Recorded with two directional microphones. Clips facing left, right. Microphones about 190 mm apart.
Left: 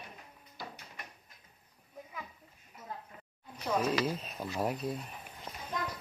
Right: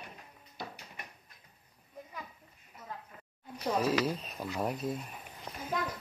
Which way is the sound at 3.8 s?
Centre (ahead or behind).